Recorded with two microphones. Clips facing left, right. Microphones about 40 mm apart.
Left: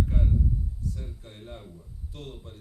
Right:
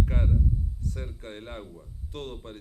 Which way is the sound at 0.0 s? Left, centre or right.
Right.